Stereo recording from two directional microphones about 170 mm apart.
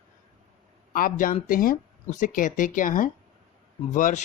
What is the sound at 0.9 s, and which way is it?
Speech, 55° left (ahead or behind).